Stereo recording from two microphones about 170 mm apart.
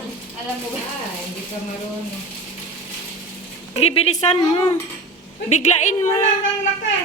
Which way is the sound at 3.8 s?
40° left (ahead or behind).